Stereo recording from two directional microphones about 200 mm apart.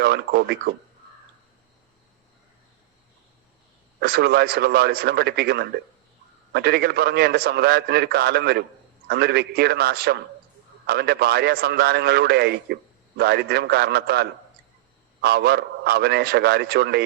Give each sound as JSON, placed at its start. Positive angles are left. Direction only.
{"t": 0.0, "sound": "a man's voice", "side_deg": -55}
{"t": 4.0, "sound": "a man's voice", "side_deg": -50}